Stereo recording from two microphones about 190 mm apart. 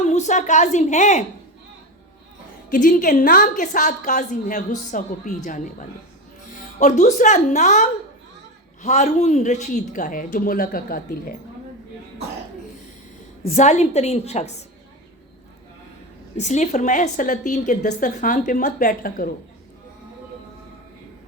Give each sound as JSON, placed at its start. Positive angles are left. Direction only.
{"t": 0.0, "sound": "a woman's voice", "side_deg": 35}
{"t": 2.7, "sound": "a woman's voice", "side_deg": 45}
{"t": 13.5, "sound": "a woman's voice", "side_deg": 40}
{"t": 16.4, "sound": "a woman's voice", "side_deg": 40}